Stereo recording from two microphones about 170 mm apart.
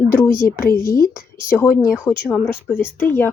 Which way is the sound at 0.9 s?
20° left (ahead or behind).